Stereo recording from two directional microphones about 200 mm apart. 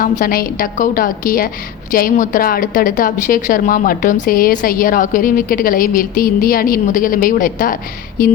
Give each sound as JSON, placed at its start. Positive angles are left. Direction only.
{"t": 0.0, "sound": "a woman's voice", "side_deg": 45}